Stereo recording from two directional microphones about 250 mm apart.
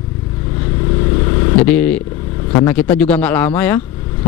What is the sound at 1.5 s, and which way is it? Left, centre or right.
Speech, centre.